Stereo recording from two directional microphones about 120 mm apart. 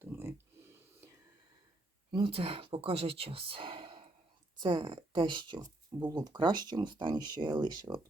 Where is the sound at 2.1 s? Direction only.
45° right (ahead or behind).